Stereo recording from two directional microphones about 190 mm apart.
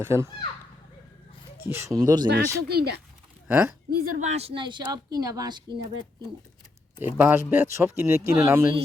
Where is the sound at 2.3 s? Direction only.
60° right (ahead or behind).